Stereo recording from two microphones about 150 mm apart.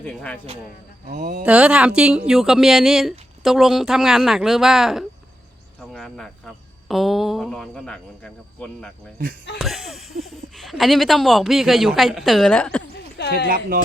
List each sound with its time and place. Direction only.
0.0 s speech: 10° left (ahead or behind)
1.2 s speech: 60° right (ahead or behind)
1.5 s speech: 10° right (ahead or behind)
5.9 s cricket: 5° left (ahead or behind)
6.8 s speech: centre (ahead or behind)
9.6 s speech: centre (ahead or behind)
13.2 s a sound: 90° left